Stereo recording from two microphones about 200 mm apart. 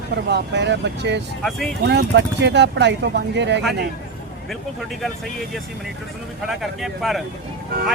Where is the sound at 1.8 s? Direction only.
60° right (ahead or behind).